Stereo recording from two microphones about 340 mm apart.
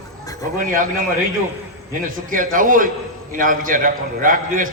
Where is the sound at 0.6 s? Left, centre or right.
Right.